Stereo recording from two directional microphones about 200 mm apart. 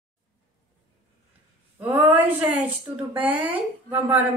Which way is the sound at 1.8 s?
10° right (ahead or behind).